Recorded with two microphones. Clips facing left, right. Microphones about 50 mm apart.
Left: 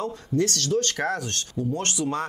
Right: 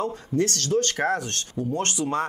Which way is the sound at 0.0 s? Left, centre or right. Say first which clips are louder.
Right 1 dB; right.